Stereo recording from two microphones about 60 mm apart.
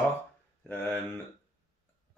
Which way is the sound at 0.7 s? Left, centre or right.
Left.